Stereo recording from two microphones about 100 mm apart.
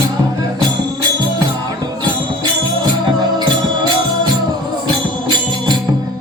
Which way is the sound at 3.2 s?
45° right (ahead or behind).